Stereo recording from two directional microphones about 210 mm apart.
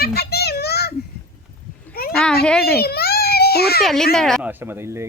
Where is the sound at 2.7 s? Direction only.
50° left (ahead or behind).